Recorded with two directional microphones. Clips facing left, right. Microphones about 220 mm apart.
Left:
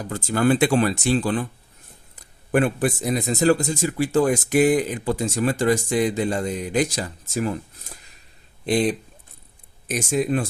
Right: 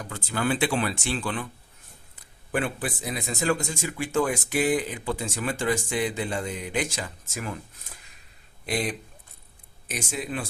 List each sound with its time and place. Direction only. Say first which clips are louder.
0.1 s speech: left 8 dB; 45° left (ahead or behind)
8.6 s speech: left 8 dB; 30° left (ahead or behind)
9.9 s speech: left 10 dB; 45° left (ahead or behind)